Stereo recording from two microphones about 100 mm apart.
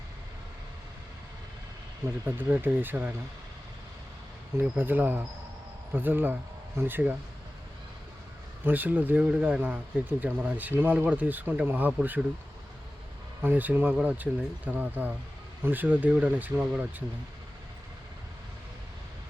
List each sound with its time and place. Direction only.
2.2 s speech: 20° right (ahead or behind)
4.8 s speech: 20° right (ahead or behind)
8.6 s speech: 20° right (ahead or behind)
13.4 s speech: 20° right (ahead or behind)